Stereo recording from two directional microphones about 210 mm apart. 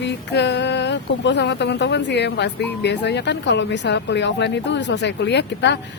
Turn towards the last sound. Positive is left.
turn(degrees=55)  # may be behind; listen again after turning